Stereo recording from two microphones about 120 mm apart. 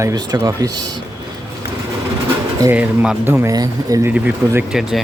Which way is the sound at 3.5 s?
30° right (ahead or behind).